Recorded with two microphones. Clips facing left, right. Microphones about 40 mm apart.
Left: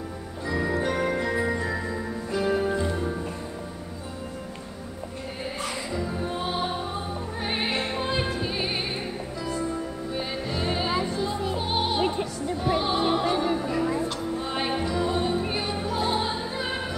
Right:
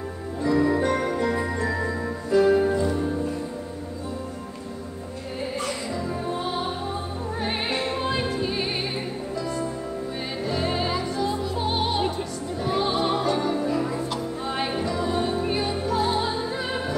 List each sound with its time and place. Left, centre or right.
0.4 s music: centre
2.7 s music: left
7.4 s music: centre
10.4 s music: centre
13.4 s music: centre